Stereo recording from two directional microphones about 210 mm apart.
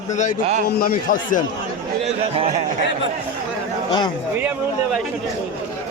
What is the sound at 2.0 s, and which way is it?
Speech, 30° right (ahead or behind).